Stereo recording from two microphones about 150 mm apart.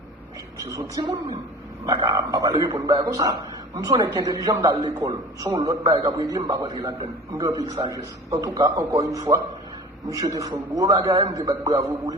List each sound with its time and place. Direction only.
0.6 s a man's voice: 25° right (ahead or behind)